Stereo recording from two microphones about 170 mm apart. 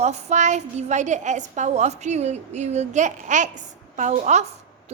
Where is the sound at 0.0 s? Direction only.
40° right (ahead or behind).